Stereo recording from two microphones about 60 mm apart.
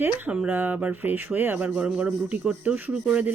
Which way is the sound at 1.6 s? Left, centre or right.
Centre.